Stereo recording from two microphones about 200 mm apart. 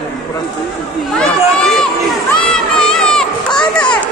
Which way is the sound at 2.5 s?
5° left (ahead or behind).